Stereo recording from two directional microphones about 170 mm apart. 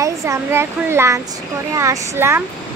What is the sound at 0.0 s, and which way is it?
Speech, 20° right (ahead or behind).